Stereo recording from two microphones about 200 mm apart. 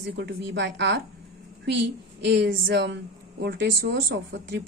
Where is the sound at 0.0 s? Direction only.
50° right (ahead or behind).